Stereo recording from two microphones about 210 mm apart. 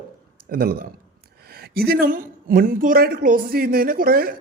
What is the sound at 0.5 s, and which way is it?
Speech, 45° right (ahead or behind).